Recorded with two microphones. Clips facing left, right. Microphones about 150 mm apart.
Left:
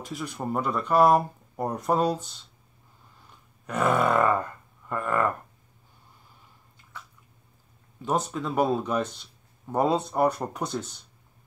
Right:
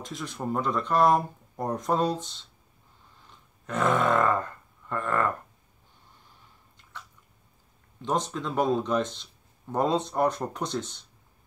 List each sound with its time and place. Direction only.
0.0 s speech: 10° left (ahead or behind)
8.0 s speech: 5° left (ahead or behind)